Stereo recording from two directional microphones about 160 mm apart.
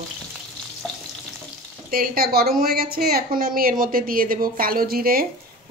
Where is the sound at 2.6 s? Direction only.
70° right (ahead or behind).